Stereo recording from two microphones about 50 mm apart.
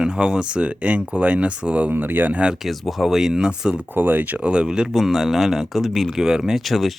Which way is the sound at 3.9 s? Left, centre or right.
Right.